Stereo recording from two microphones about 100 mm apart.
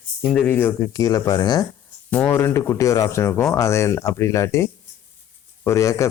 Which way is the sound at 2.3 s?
25° left (ahead or behind).